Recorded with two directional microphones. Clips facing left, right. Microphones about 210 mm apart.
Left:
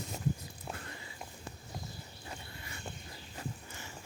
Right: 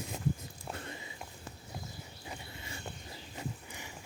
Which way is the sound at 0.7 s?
20° right (ahead or behind).